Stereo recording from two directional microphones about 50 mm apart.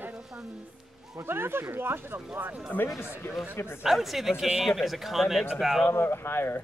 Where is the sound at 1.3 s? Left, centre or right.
Right.